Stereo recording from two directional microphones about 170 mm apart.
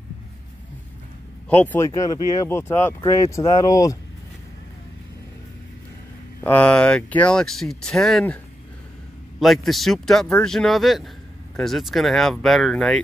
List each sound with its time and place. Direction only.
1.5 s speech: 10° left (ahead or behind)
6.4 s speech: 10° left (ahead or behind)
9.4 s speech: centre (ahead or behind)